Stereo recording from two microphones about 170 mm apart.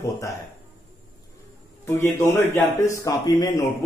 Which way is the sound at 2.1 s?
15° left (ahead or behind).